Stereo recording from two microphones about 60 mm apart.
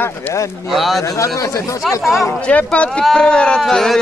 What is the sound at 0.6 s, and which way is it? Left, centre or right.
Speech, centre.